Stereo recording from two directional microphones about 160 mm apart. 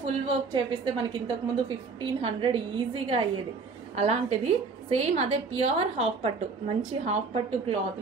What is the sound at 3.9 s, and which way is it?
A woman's voice, 45° right (ahead or behind).